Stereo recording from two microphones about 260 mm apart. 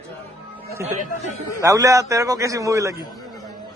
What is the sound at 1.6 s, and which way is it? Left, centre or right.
A man's voice, centre.